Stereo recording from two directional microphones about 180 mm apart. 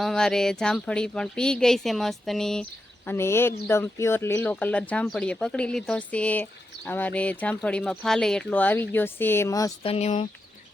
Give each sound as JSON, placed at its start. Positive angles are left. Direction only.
{"t": 0.0, "sound": "speech", "side_deg": 5}
{"t": 3.1, "sound": "speech", "side_deg": 15}
{"t": 9.8, "sound": "speech", "side_deg": 35}